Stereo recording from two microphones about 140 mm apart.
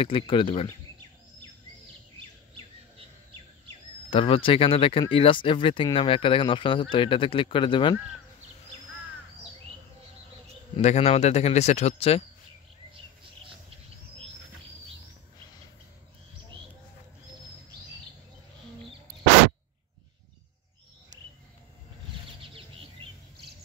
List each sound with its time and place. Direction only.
0.0 s speech: 40° left (ahead or behind)
4.1 s speech: 40° left (ahead or behind)
10.8 s speech: 50° left (ahead or behind)
22.4 s bird: 40° right (ahead or behind)